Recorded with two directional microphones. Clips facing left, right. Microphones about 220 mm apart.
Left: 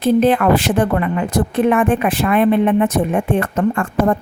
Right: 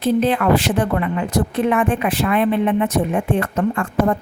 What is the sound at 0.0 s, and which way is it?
A woman's voice, 50° left (ahead or behind).